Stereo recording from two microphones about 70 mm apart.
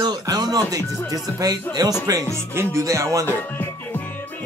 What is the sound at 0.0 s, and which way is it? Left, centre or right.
Speech, right.